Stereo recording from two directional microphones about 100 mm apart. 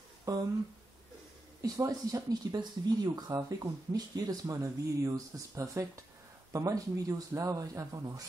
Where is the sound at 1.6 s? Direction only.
35° right (ahead or behind).